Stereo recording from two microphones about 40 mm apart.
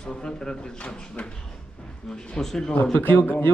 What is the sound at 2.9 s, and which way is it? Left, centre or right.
Speech, left.